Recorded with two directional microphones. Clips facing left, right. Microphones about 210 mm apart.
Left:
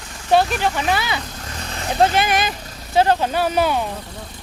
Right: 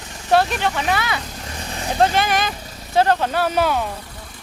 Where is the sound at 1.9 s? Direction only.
5° left (ahead or behind).